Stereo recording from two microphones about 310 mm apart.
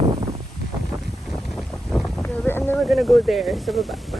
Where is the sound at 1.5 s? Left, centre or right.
Centre.